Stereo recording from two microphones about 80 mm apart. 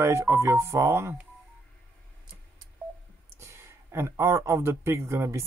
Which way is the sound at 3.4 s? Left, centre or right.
Right.